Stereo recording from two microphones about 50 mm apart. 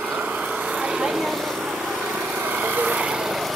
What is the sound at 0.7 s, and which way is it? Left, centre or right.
Vehicle, centre.